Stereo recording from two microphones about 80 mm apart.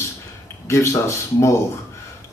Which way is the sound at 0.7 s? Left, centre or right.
Left.